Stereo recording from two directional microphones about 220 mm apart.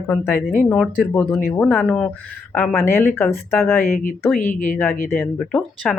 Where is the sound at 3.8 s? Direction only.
40° left (ahead or behind).